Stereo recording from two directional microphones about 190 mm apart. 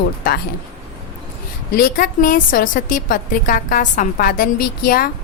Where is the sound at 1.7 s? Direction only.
50° left (ahead or behind).